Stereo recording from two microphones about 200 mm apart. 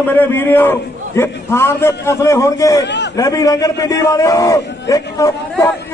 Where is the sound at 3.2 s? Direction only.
15° left (ahead or behind).